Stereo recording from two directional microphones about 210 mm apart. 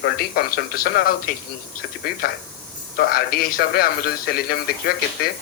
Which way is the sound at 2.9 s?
45° left (ahead or behind).